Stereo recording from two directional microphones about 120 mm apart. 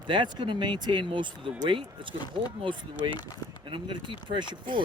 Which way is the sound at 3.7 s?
45° right (ahead or behind).